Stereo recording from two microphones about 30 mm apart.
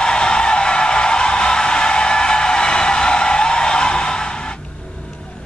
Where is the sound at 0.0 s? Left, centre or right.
Left.